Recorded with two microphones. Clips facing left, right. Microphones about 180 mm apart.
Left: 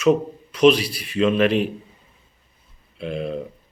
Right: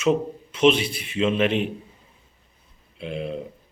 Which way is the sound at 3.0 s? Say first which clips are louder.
Left 3 dB; 40° left (ahead or behind).